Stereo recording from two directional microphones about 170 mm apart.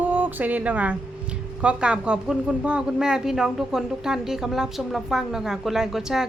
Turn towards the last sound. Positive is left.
turn(degrees=0)  # may be behind; listen again after turning